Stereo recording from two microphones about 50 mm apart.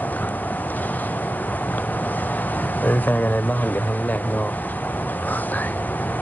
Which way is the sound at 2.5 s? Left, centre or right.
Left.